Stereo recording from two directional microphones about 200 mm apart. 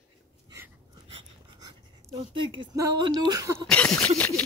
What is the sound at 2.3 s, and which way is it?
Speech, 20° right (ahead or behind).